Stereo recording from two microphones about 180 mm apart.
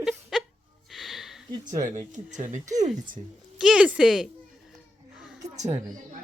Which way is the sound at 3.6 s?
5° right (ahead or behind).